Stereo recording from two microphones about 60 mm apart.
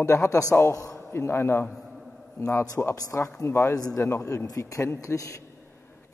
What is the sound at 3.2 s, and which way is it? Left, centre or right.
Speech, left.